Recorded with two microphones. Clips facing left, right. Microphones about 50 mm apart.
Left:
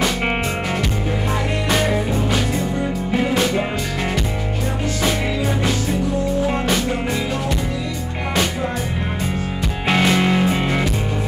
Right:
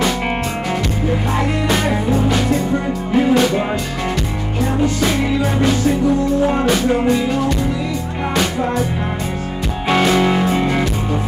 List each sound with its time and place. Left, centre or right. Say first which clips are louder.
1.7 s music: left 1 dB; centre
9.9 s music: right 3 dB; centre